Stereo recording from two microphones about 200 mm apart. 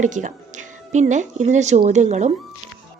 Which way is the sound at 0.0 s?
40° right (ahead or behind).